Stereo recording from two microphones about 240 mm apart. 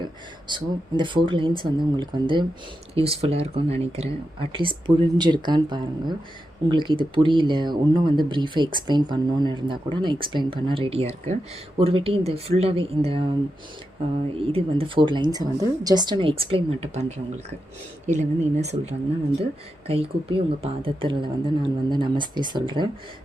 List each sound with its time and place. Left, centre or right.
0.0 s speech: centre
14.3 s speech: right